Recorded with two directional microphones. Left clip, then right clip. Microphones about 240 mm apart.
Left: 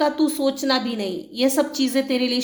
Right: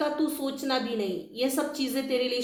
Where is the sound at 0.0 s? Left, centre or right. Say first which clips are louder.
Left 8 dB; left.